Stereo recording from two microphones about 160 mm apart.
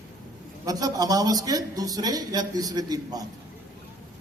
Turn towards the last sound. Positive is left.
turn(degrees=-25)  # may be behind; listen again after turning